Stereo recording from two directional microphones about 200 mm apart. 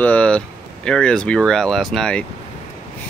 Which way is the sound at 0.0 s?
5° left (ahead or behind).